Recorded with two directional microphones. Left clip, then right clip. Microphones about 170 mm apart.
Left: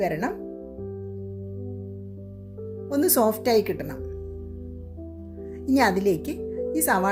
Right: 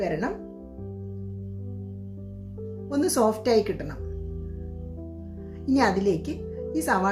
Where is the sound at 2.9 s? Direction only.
45° left (ahead or behind).